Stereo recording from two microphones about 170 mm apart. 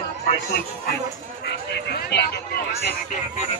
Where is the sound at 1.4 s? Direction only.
70° left (ahead or behind).